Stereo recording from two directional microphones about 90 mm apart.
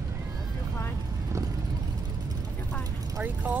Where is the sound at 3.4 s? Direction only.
20° right (ahead or behind).